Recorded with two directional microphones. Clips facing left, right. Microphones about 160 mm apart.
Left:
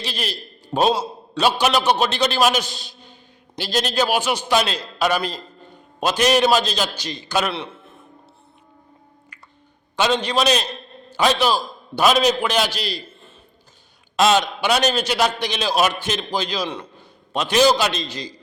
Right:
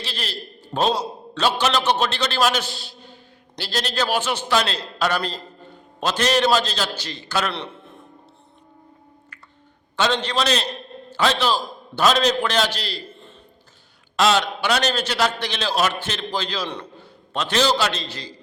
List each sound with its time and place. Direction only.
0.0 s a man's voice: 15° left (ahead or behind)
7.5 s a man's voice: 5° left (ahead or behind)
9.9 s a man's voice: 15° left (ahead or behind)